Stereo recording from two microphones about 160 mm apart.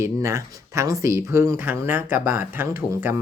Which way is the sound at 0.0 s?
20° right (ahead or behind).